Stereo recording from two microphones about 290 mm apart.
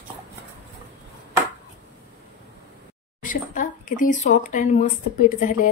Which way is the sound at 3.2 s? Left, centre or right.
Left.